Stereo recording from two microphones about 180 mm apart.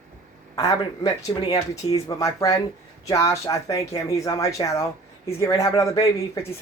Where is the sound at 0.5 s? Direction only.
20° left (ahead or behind).